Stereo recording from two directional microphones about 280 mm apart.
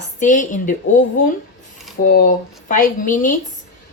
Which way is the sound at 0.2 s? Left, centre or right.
Left.